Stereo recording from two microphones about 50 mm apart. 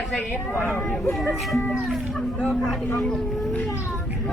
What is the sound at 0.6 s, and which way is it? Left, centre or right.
Speech, left.